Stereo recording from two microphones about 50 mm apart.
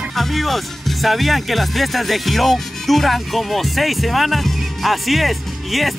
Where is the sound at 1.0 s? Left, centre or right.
Centre.